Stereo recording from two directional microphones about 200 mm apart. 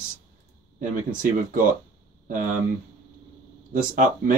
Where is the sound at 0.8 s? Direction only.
45° right (ahead or behind).